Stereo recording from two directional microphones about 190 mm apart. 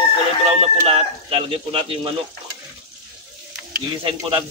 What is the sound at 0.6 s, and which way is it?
Speech, 30° right (ahead or behind).